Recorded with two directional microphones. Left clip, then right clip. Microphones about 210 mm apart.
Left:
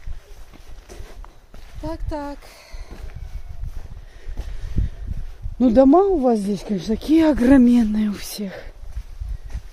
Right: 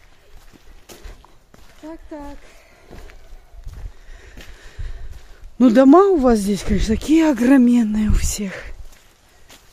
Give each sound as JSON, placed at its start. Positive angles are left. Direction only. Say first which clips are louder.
{"t": 1.9, "sound": "speech", "louder": "left 5 dB", "side_deg": 40}
{"t": 4.2, "sound": "a sound", "louder": "right 2 dB", "side_deg": -10}
{"t": 5.6, "sound": "speech", "louder": "right 3 dB", "side_deg": -25}